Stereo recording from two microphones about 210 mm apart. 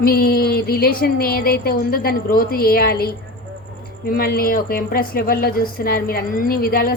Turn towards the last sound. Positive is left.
turn(degrees=45)  # may be behind; listen again after turning